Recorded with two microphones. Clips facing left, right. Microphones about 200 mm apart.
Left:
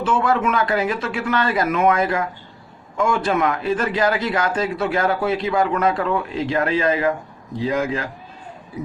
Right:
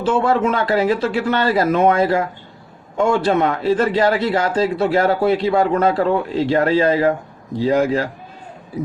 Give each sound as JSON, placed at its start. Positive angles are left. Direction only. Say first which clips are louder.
{"t": 0.0, "sound": "speech", "louder": "right 3 dB", "side_deg": -30}